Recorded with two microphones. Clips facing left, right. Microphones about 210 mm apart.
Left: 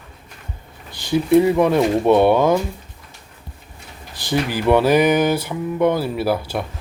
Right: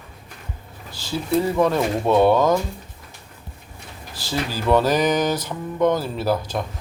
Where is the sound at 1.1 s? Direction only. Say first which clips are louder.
Left 7 dB; 15° left (ahead or behind).